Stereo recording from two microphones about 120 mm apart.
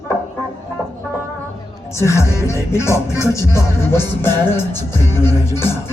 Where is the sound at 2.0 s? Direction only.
25° left (ahead or behind).